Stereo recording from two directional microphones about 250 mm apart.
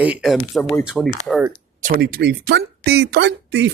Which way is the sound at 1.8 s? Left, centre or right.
Right.